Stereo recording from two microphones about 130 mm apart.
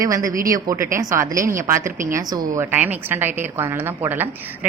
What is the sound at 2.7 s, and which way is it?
A woman's voice, 15° right (ahead or behind).